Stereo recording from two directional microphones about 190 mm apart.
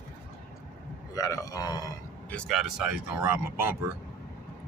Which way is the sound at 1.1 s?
15° left (ahead or behind).